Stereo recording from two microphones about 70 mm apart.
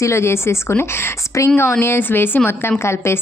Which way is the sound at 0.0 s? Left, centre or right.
Left.